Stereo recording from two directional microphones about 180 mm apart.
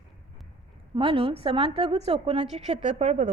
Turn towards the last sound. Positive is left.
turn(degrees=-40)  # may be behind; listen again after turning